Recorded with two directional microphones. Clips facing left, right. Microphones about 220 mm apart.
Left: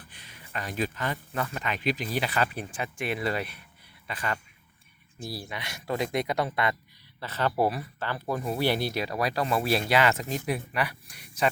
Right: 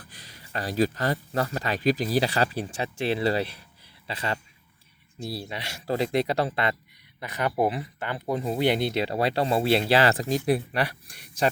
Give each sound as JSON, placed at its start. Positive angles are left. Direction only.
{"t": 0.1, "sound": "speech", "side_deg": -35}
{"t": 7.2, "sound": "speech", "side_deg": -15}